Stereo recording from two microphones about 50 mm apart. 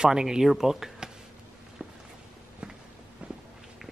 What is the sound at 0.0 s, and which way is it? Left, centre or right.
Speech, centre.